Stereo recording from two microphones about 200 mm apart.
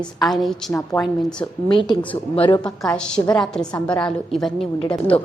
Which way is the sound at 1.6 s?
25° left (ahead or behind).